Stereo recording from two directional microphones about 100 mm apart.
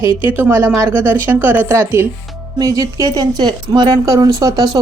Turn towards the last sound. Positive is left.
turn(degrees=-40)  # may be behind; listen again after turning